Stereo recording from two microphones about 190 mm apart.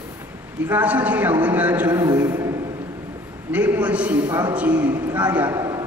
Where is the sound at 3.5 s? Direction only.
5° right (ahead or behind).